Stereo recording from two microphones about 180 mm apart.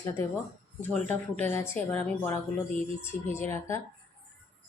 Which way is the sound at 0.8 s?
5° left (ahead or behind).